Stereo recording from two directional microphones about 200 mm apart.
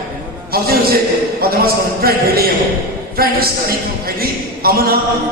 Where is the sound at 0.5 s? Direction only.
50° right (ahead or behind).